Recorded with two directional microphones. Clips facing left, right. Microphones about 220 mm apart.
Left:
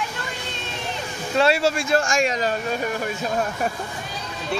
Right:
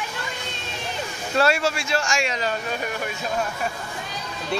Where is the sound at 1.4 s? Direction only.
30° left (ahead or behind).